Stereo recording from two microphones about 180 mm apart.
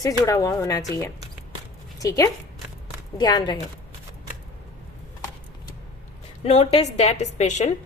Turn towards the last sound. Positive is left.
turn(degrees=40)  # may be behind; listen again after turning